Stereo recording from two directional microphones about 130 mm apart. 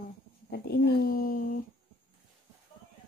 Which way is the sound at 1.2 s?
90° left.